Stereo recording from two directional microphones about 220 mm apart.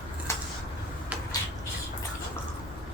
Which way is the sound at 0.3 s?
15° left (ahead or behind).